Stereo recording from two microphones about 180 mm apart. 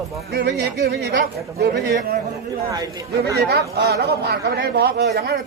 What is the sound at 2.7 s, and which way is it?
Speech, 20° right (ahead or behind).